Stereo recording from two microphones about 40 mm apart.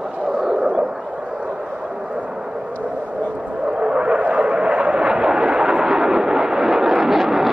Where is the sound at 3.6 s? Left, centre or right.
Right.